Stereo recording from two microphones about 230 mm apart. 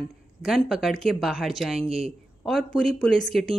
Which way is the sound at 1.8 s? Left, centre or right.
Right.